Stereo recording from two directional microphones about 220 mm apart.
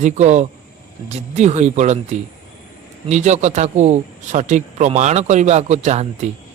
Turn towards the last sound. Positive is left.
turn(degrees=-30)  # may be behind; listen again after turning